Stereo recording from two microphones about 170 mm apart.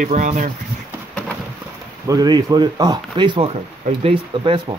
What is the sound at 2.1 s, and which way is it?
Speech, 25° right (ahead or behind).